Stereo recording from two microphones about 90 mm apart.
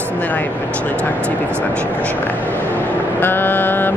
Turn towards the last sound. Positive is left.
turn(degrees=20)  # may be behind; listen again after turning